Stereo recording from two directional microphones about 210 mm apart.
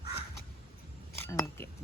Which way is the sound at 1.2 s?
10° left (ahead or behind).